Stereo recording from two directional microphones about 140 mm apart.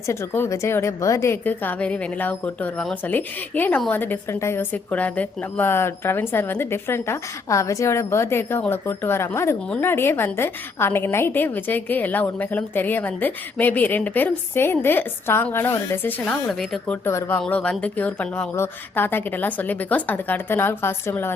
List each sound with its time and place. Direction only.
0.1 s a woman's voice: 20° left (ahead or behind); by 17.0 s centre (ahead or behind)
17.1 s a woman's voice: 15° left (ahead or behind)